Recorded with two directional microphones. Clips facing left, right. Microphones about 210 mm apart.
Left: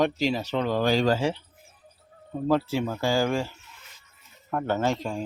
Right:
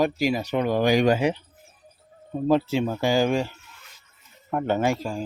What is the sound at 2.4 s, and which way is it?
Speech, 20° right (ahead or behind).